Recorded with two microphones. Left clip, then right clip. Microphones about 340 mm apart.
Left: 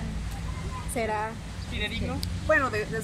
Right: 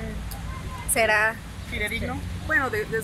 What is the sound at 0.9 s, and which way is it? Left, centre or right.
Speech, right.